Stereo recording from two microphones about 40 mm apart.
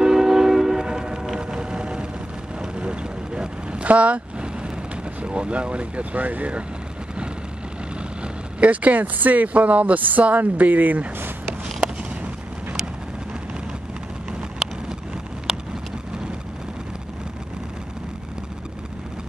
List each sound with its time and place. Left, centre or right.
0.0 s train: centre
1.4 s vehicle: right
5.2 s speech: right
6.1 s speech: right
8.2 s speech: right
14.6 s vehicle: centre